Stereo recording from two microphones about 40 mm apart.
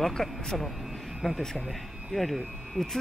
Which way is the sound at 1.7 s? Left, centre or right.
Centre.